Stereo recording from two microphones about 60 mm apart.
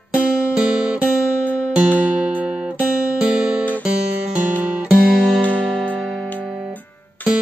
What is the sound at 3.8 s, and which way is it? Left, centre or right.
Music, centre.